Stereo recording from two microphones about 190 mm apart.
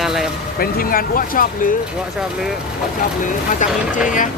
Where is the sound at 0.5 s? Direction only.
50° left (ahead or behind).